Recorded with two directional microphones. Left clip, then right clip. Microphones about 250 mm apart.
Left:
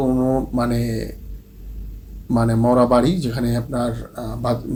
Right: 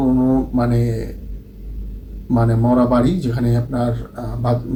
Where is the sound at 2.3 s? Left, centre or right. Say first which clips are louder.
Even; left.